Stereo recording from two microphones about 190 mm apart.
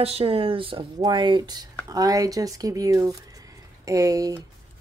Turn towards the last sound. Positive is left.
turn(degrees=-20)  # may be behind; listen again after turning